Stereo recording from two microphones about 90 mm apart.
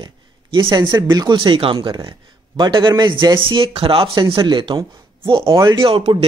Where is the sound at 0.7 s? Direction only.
50° right (ahead or behind); by 2.0 s 70° right (ahead or behind).